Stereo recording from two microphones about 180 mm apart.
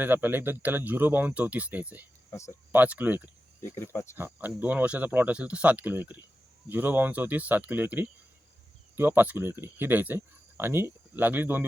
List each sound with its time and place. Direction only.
0.0 s speech: 10° right (ahead or behind)
2.3 s speech: 15° left (ahead or behind)
2.7 s speech: 10° right (ahead or behind)